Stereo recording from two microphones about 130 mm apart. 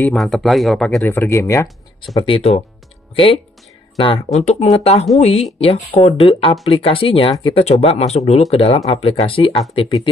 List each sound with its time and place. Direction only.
0.0 s speech: 5° left (ahead or behind)
1.0 s speech: 15° left (ahead or behind)
2.1 s speech: 45° left (ahead or behind)
4.0 s speech: 50° left (ahead or behind)